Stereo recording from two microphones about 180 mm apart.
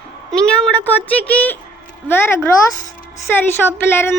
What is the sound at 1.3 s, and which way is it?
Speech, 10° left (ahead or behind).